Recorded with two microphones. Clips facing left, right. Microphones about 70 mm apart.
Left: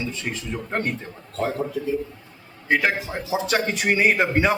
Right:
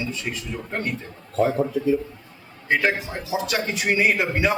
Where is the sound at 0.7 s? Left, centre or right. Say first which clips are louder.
Left 2 dB; left.